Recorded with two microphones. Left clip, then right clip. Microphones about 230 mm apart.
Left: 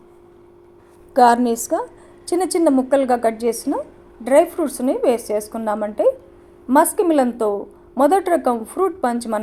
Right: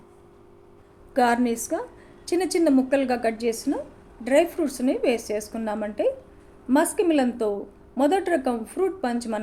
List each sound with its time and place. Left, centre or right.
1.5 s a woman's voice: centre